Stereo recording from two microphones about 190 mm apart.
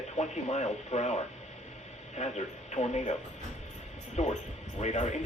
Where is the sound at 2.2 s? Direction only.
35° left (ahead or behind).